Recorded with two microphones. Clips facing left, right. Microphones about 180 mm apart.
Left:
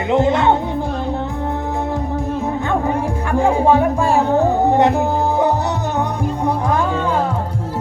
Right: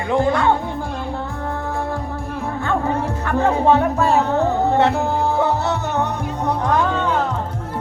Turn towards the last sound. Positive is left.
turn(degrees=10)  # may be behind; listen again after turning